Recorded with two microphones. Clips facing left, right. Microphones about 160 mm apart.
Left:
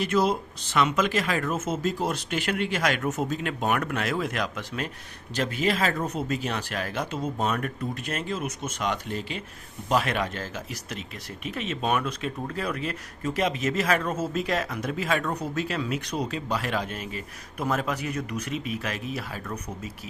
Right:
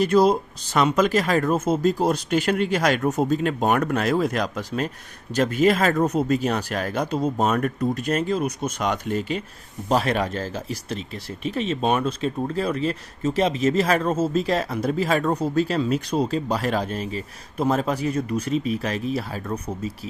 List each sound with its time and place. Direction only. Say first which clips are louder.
0.0 s speech: right 6 dB; 35° right (ahead or behind)
9.9 s speech: right 4 dB; 35° right (ahead or behind)